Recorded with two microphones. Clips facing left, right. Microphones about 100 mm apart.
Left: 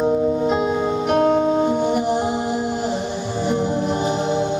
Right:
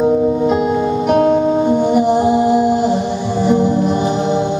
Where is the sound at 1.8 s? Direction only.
50° right (ahead or behind).